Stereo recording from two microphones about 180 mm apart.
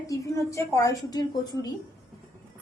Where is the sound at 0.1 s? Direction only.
15° left (ahead or behind).